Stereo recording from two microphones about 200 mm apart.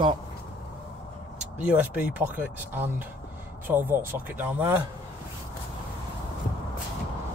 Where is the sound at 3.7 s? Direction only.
10° right (ahead or behind).